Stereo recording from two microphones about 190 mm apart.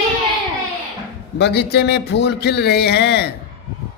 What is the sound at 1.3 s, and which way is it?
A man's voice, 60° left (ahead or behind).